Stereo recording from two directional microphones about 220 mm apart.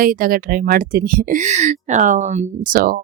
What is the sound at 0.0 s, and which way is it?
Speech, 40° right (ahead or behind).